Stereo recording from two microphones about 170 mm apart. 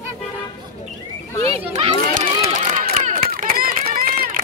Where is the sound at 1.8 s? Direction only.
40° right (ahead or behind).